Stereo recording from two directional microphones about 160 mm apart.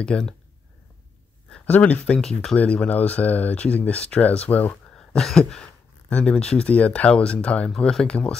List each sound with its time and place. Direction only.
0.0 s speech: 5° left (ahead or behind)
1.5 s speech: 10° left (ahead or behind)